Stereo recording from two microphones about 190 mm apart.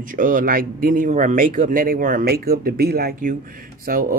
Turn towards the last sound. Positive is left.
turn(degrees=-50)  # may be behind; listen again after turning